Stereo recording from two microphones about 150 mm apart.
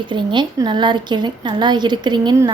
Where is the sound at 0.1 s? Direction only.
30° right (ahead or behind).